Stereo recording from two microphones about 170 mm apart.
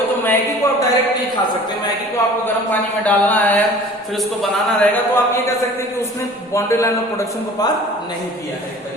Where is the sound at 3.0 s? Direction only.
10° left (ahead or behind).